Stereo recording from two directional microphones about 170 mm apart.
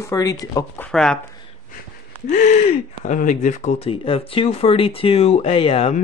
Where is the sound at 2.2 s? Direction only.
45° left (ahead or behind).